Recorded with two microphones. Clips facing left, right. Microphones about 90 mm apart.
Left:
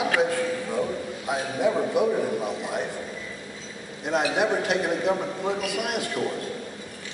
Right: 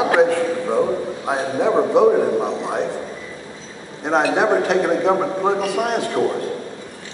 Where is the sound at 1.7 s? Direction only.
90° right.